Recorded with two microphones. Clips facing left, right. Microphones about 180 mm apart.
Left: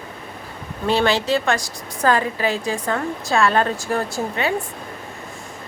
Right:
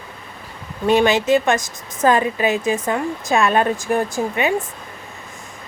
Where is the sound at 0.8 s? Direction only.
15° right (ahead or behind).